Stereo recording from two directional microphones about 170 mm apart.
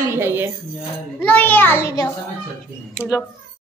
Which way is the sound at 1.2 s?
10° left (ahead or behind).